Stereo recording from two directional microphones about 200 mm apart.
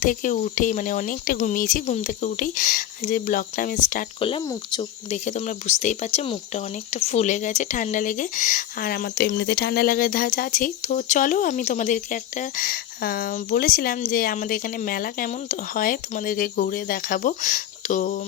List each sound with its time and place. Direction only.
0.0 s speech: 40° left (ahead or behind)
4.2 s speech: 25° left (ahead or behind)
5.2 s speech: 35° left (ahead or behind)